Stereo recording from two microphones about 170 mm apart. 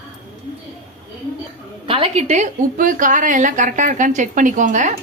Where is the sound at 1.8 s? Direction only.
30° right (ahead or behind).